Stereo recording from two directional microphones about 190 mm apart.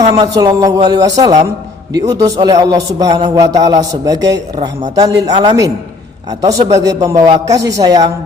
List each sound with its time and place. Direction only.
0.2 s a man's voice: 20° right (ahead or behind)